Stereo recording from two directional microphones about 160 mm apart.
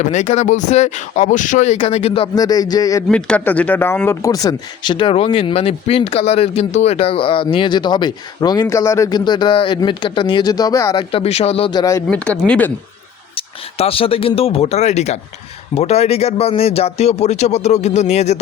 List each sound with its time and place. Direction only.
0.0 s speech: 45° left (ahead or behind); by 3.0 s 25° left (ahead or behind)
3.1 s speech: 5° left (ahead or behind)
11.1 s speech: 40° left (ahead or behind); by 12.0 s 25° left (ahead or behind)
12.0 s speech: 5° left (ahead or behind)
13.3 s speech: 35° left (ahead or behind)